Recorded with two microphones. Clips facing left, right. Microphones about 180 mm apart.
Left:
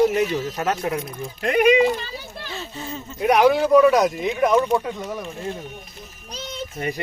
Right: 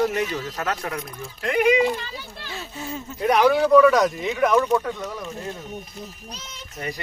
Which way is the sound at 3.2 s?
10° left (ahead or behind).